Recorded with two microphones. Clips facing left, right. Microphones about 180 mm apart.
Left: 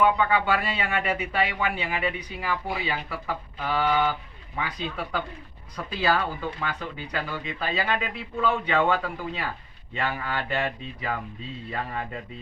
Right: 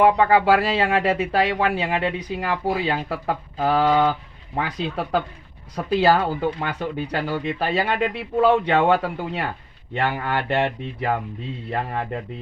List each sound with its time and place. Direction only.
0.0 s speech: 75° right (ahead or behind)
2.6 s speech: 65° right (ahead or behind)